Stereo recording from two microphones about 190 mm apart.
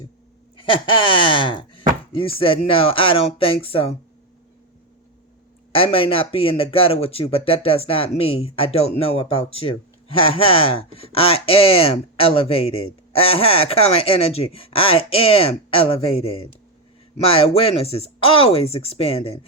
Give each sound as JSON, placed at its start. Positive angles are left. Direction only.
{"t": 0.6, "sound": "speech", "side_deg": 25}
{"t": 5.7, "sound": "speech", "side_deg": 30}